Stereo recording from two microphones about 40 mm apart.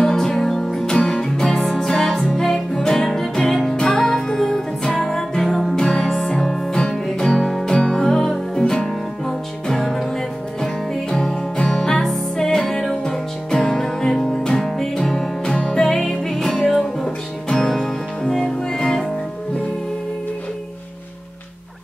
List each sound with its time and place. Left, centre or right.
0.0 s music: centre
3.7 s music: left
4.0 s music: centre
5.8 s music: centre
7.7 s music: centre
11.1 s music: centre